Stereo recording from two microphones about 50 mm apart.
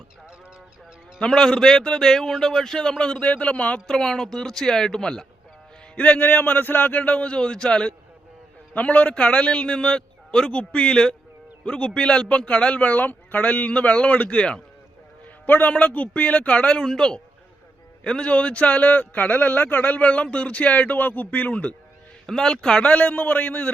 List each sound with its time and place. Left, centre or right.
1.4 s a man's voice: centre
3.2 s a man's voice: left
3.8 s a man's voice: centre
6.1 s a man's voice: left; by 7.9 s centre
8.7 s a man's voice: left; by 10.5 s centre
10.5 s a man's voice: left
12.8 s a man's voice: left
15.4 s a man's voice: left
16.8 s a man's voice: centre
22.3 s a man's voice: centre
22.9 s a man's voice: left